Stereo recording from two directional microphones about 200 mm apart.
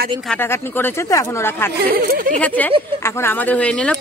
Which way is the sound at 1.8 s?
45° right (ahead or behind).